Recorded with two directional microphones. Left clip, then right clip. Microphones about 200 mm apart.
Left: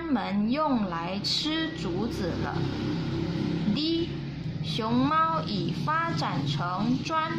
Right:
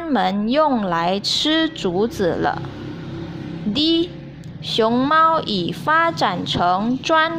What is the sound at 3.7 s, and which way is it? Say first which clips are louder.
A woman's voice: right 13 dB; 40° right (ahead or behind).